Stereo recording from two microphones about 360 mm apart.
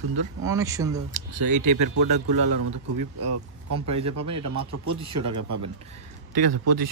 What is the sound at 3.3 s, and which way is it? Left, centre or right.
Speech, right.